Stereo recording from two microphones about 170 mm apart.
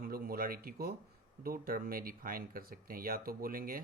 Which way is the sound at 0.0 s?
60° right (ahead or behind).